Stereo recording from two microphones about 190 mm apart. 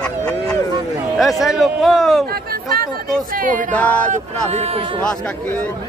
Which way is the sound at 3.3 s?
45° right (ahead or behind).